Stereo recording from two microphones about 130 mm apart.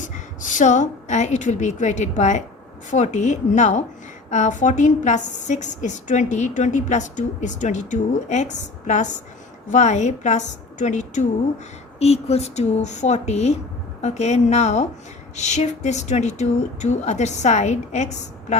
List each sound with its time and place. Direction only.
0.0 s a woman's voice: 75° left (ahead or behind)
11.9 s speech: 55° left (ahead or behind)